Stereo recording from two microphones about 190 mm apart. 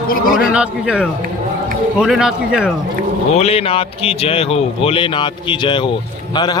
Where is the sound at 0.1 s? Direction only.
50° left (ahead or behind).